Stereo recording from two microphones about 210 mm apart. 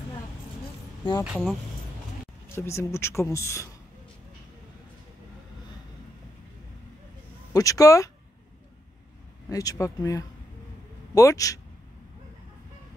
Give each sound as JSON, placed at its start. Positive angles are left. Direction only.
{"t": 1.2, "sound": "speech", "side_deg": -5}
{"t": 2.5, "sound": "speech", "side_deg": 10}
{"t": 7.5, "sound": "speech", "side_deg": 15}
{"t": 9.5, "sound": "speech", "side_deg": 15}